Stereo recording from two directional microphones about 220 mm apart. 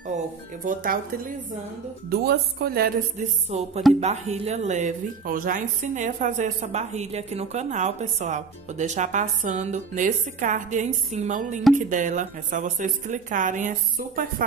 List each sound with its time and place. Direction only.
0.7 s a woman's voice: 40° right (ahead or behind)
3.4 s a woman's voice: 30° right (ahead or behind)